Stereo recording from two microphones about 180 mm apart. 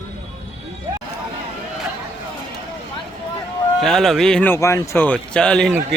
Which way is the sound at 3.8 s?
5° left (ahead or behind).